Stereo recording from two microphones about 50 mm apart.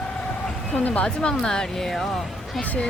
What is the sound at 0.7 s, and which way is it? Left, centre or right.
Speech, left.